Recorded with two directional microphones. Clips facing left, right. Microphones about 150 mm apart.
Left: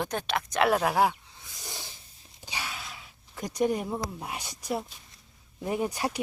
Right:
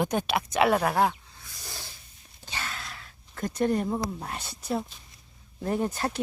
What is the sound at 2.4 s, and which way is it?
Speech, 10° left (ahead or behind).